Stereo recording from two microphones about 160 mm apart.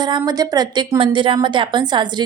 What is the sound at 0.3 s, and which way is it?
A woman's voice, 25° right (ahead or behind).